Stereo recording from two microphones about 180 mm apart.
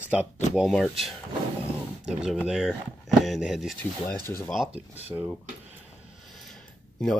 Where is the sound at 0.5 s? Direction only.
Centre (ahead or behind).